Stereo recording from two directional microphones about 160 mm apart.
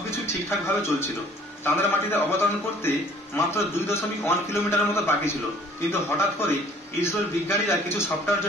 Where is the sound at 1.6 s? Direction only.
15° left (ahead or behind).